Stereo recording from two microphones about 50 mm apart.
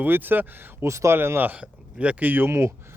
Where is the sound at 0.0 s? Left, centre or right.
Right.